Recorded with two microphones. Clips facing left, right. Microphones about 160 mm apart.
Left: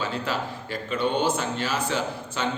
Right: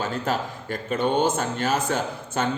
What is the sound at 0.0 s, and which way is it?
Speech, 45° right (ahead or behind).